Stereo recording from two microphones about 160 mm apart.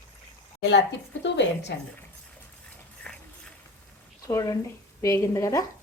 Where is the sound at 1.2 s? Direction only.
90° left.